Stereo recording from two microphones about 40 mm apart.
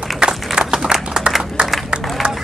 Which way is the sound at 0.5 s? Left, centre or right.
Centre.